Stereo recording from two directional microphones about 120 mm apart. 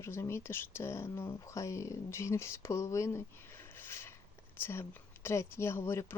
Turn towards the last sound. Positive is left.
turn(degrees=20)  # may be behind; listen again after turning